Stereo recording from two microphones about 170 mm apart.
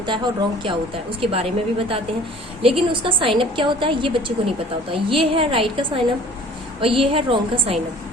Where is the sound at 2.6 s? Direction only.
30° right (ahead or behind).